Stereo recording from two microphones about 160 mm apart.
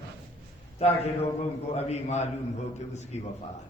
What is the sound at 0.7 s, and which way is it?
A man's voice, 40° left (ahead or behind).